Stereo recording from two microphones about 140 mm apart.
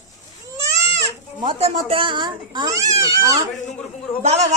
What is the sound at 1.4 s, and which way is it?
Speech, 40° right (ahead or behind).